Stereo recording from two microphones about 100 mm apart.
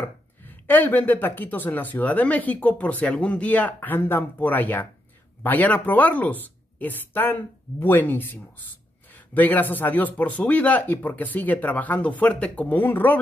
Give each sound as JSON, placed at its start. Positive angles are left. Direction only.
{"t": 0.4, "sound": "speech", "side_deg": 20}